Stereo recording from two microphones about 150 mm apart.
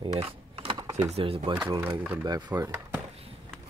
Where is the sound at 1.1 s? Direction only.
40° right (ahead or behind).